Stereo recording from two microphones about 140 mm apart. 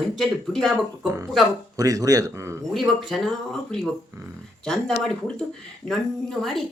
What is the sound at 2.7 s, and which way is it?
Speech, centre (ahead or behind).